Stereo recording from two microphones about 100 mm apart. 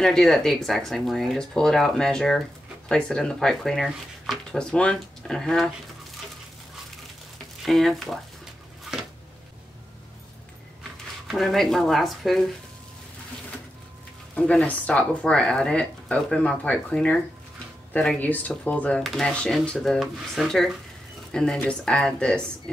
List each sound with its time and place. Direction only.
0.0 s speech: 5° left (ahead or behind)
7.6 s speech: centre (ahead or behind)
11.2 s speech: centre (ahead or behind)
14.3 s speech: 10° left (ahead or behind)